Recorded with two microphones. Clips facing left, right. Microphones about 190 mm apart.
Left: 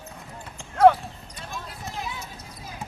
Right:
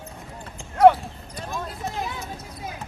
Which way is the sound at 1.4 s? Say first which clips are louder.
Right 7 dB; 45° right (ahead or behind).